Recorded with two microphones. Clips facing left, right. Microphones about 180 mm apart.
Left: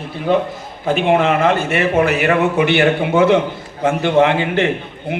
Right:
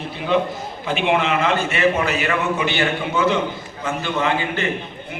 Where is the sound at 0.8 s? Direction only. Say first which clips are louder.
Left 6 dB; 45° left (ahead or behind).